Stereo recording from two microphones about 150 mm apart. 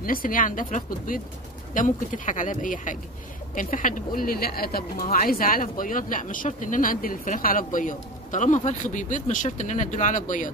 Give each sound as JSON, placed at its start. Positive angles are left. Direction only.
{"t": 0.0, "sound": "speech", "side_deg": 70}